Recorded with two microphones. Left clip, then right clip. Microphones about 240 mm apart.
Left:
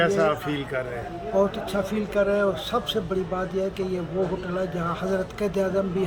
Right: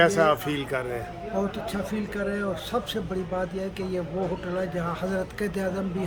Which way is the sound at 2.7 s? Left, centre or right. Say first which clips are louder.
Left 3 dB; centre.